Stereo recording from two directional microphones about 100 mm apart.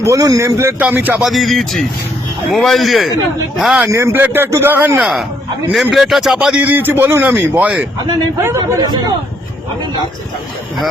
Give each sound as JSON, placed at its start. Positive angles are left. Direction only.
{"t": 0.0, "sound": "a man's voice", "side_deg": -35}
{"t": 0.8, "sound": "a man's voice", "side_deg": -15}
{"t": 1.2, "sound": "speech", "side_deg": 0}
{"t": 3.8, "sound": "a man's voice", "side_deg": -30}
{"t": 4.9, "sound": "a man's voice", "side_deg": -5}
{"t": 8.8, "sound": "a man's voice", "side_deg": -40}